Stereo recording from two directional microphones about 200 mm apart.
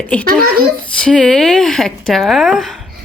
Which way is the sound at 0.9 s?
5° left (ahead or behind).